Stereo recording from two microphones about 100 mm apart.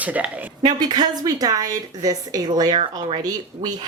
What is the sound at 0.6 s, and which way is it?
A woman's voice, 50° right (ahead or behind).